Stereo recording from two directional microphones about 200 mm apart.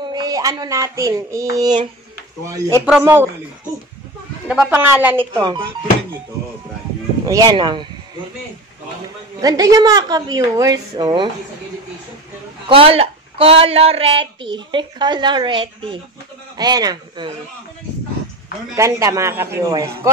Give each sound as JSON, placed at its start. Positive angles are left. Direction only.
{"t": 0.0, "sound": "speech", "side_deg": -20}
{"t": 2.8, "sound": "speech", "side_deg": -5}
{"t": 4.5, "sound": "speech", "side_deg": -5}
{"t": 5.2, "sound": "speech", "side_deg": -20}
{"t": 7.2, "sound": "speech", "side_deg": -20}
{"t": 9.4, "sound": "speech", "side_deg": -20}
{"t": 12.6, "sound": "speech", "side_deg": -30}
{"t": 18.8, "sound": "speech", "side_deg": -15}